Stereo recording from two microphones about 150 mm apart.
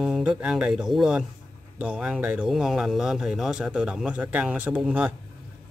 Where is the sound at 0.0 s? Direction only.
5° right (ahead or behind).